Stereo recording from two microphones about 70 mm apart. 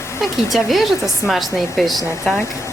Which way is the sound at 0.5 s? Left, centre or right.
Centre.